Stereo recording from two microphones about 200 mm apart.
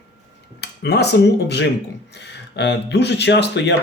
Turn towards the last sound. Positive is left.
turn(degrees=60)  # may be behind; listen again after turning